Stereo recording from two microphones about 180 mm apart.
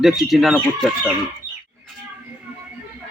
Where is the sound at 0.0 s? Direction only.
Centre (ahead or behind).